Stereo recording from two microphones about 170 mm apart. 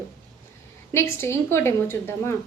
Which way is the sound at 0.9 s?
15° left (ahead or behind).